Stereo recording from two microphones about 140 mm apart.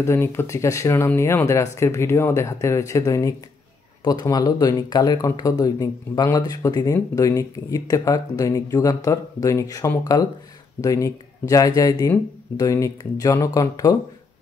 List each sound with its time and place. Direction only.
0.0 s speech: 20° left (ahead or behind)